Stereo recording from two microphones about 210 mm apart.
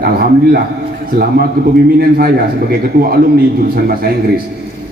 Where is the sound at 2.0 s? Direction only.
45° right (ahead or behind).